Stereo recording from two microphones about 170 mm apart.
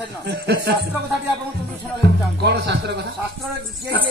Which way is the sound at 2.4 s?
80° right.